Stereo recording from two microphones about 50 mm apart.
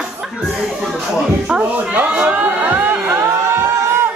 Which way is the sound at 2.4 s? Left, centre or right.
Right.